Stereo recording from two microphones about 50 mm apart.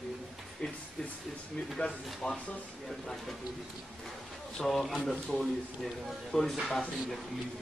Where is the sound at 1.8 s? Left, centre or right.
Centre.